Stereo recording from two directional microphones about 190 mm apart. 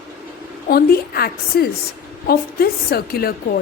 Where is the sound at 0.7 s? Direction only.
55° left (ahead or behind).